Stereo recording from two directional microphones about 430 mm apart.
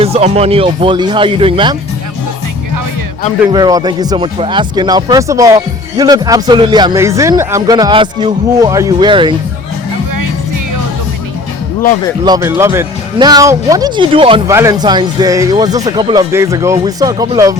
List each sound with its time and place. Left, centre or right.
0.0 s speech: centre
3.4 s speech: centre
12.2 s speech: centre